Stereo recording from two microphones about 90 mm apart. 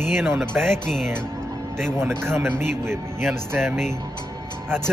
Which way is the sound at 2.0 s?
30° right (ahead or behind).